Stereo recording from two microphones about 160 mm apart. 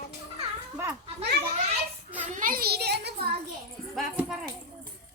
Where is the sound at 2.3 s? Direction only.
60° right (ahead or behind); by 3.2 s 90° right.